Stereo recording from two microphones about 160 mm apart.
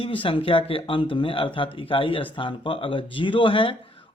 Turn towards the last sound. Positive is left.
turn(degrees=35)  # may be behind; listen again after turning